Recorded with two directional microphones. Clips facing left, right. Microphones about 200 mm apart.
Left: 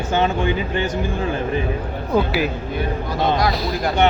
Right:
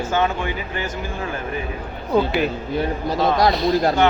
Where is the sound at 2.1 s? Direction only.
5° left (ahead or behind).